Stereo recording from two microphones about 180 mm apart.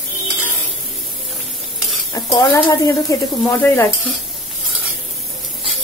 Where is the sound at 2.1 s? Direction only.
20° left (ahead or behind).